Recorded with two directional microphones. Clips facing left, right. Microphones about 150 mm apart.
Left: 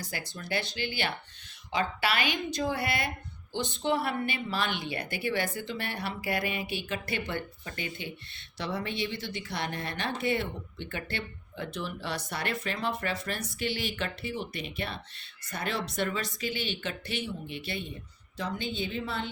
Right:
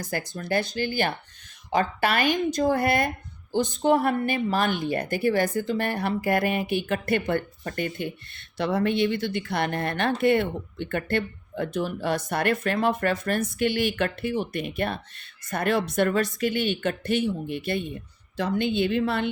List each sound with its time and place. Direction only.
0.0 s speech: 45° right (ahead or behind)
18.3 s a woman's voice: 65° right (ahead or behind)